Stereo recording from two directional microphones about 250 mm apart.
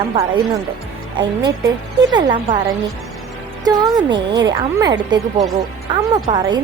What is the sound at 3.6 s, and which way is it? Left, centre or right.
Speech, centre.